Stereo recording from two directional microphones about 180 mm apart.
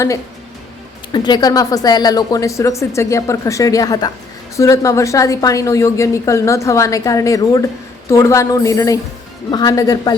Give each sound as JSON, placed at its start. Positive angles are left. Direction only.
{"t": 1.1, "sound": "a woman's voice", "side_deg": 25}